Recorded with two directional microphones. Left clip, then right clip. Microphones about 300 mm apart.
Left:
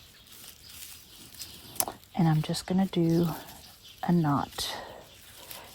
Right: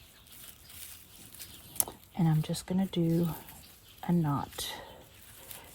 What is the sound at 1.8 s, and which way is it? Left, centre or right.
Speech, left.